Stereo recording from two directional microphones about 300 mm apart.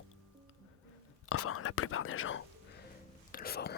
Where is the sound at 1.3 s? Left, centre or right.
Left.